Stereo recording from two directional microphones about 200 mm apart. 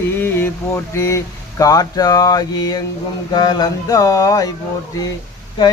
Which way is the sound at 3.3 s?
20° left (ahead or behind).